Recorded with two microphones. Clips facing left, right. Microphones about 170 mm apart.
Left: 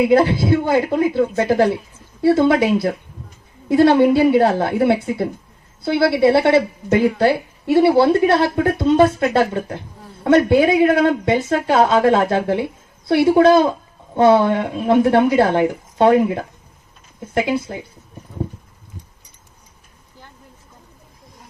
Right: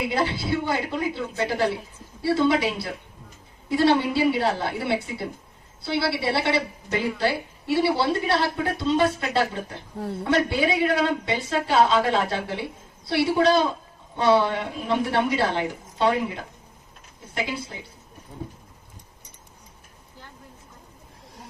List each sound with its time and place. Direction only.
0.1 s a woman's voice: 50° left (ahead or behind)